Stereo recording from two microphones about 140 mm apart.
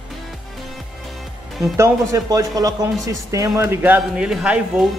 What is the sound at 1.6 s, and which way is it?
Speech, 20° right (ahead or behind).